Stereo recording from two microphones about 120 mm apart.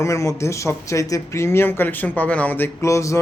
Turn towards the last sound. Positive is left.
turn(degrees=25)  # may be behind; listen again after turning